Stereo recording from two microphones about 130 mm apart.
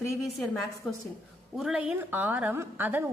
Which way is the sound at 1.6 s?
5° right (ahead or behind).